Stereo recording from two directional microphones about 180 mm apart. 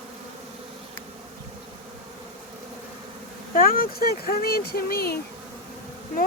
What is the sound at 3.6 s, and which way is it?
Speech, 55° left (ahead or behind).